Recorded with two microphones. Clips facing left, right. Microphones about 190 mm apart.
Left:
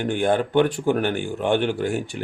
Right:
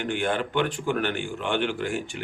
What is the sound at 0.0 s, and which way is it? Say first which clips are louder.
Speech: left 6 dB; 45° left (ahead or behind).